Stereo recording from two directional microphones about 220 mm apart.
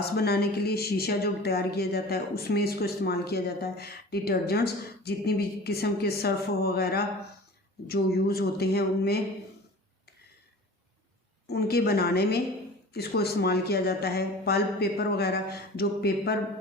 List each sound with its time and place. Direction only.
0.0 s speech: 45° left (ahead or behind)
11.4 s speech: 45° left (ahead or behind)